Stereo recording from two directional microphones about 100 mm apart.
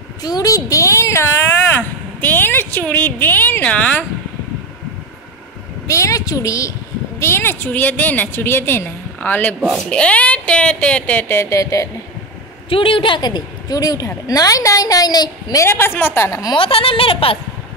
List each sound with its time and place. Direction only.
0.2 s speech: 40° left (ahead or behind)
1.8 s a sound: 20° left (ahead or behind)
5.9 s a woman's voice: 30° left (ahead or behind)
12.6 s speech: 60° left (ahead or behind); by 15.6 s 40° left (ahead or behind)
15.6 s a woman's voice: 25° left (ahead or behind)
16.5 s speech: 65° left (ahead or behind)